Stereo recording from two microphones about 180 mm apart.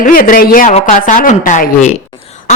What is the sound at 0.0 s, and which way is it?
A woman's voice, 50° left (ahead or behind).